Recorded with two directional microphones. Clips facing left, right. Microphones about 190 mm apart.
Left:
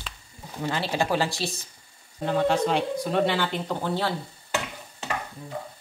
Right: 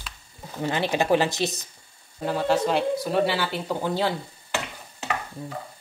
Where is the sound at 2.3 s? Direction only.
5° right (ahead or behind).